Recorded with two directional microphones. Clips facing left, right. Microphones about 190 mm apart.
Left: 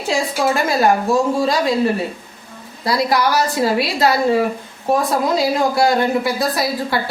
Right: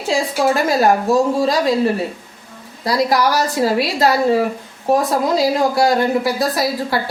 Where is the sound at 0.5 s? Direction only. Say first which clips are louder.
Right 1 dB; 40° right (ahead or behind).